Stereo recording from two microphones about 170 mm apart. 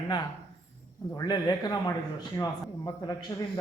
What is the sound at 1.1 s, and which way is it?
Speech, 25° left (ahead or behind).